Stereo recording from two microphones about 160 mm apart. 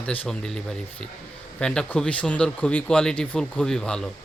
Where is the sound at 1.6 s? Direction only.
5° left (ahead or behind).